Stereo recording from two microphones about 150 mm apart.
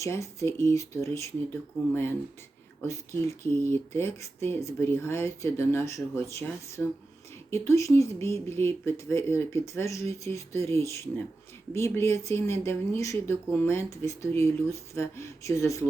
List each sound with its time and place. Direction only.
0.0 s speech: 20° left (ahead or behind)